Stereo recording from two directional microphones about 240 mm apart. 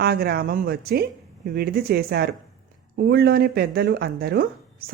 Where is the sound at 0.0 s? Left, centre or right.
Right.